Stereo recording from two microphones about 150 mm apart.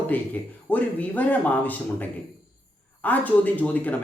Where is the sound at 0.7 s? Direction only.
10° left (ahead or behind).